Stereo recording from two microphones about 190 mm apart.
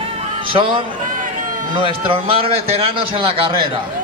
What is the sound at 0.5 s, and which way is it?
A man's voice, 25° right (ahead or behind).